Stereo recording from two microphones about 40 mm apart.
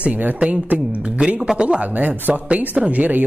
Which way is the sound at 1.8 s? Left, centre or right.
Right.